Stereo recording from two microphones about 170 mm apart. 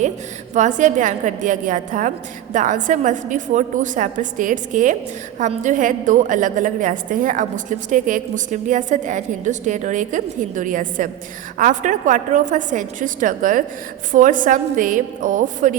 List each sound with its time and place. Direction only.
0.5 s a woman's voice: 45° right (ahead or behind)